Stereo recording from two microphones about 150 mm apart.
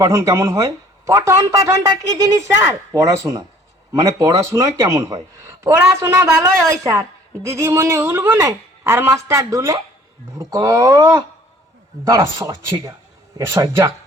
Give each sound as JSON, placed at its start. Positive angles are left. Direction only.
{"t": 0.0, "sound": "speech", "side_deg": -20}